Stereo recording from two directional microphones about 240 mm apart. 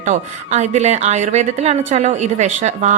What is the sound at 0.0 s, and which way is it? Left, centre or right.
A woman's voice, right.